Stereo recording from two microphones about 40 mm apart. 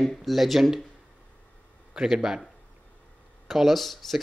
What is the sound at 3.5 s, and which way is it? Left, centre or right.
Speech, centre.